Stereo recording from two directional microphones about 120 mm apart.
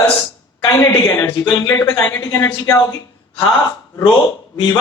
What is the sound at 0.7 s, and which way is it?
A man's voice, 25° left (ahead or behind).